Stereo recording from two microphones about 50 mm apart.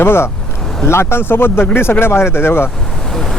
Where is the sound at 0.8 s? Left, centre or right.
Left.